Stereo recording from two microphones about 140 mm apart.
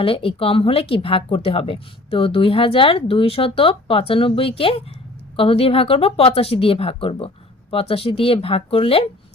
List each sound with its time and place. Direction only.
0.0 s speech: 40° left (ahead or behind)